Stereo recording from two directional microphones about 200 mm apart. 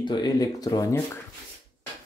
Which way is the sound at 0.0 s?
20° left (ahead or behind).